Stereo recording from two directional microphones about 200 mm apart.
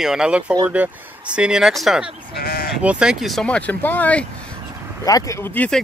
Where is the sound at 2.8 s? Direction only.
5° right (ahead or behind).